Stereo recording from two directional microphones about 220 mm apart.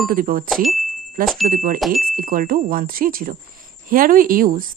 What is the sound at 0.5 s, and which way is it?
Speech, centre (ahead or behind).